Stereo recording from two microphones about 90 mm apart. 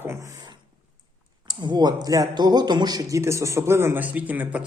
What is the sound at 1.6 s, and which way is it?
Speech, 50° right (ahead or behind).